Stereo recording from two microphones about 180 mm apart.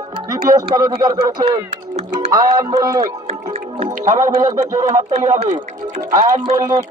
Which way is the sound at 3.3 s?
35° right (ahead or behind).